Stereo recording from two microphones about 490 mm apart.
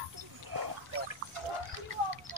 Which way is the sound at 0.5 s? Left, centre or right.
Right.